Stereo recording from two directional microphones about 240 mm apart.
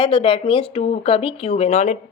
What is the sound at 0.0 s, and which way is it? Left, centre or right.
Speech, left.